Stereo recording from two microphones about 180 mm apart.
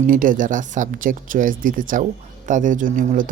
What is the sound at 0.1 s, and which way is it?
Speech, 50° right (ahead or behind).